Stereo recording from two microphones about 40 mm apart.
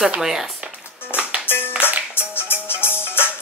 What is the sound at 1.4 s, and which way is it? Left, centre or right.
Music, left.